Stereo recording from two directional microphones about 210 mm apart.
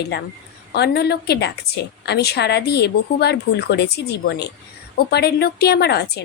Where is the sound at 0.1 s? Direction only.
55° left (ahead or behind).